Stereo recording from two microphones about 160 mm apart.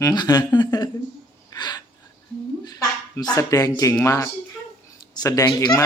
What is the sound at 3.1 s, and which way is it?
Speech, 20° left (ahead or behind).